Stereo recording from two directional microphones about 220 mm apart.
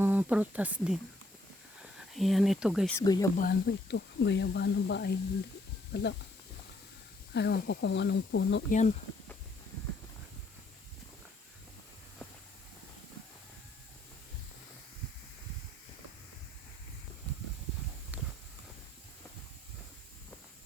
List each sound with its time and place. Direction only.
0.0 s speech: 5° right (ahead or behind)
2.9 s speech: 15° left (ahead or behind)
3.3 s speech: 45° left (ahead or behind)
7.3 s speech: 50° left (ahead or behind)
8.7 s speech: 30° left (ahead or behind)
18.1 s clip-clop: 5° right (ahead or behind)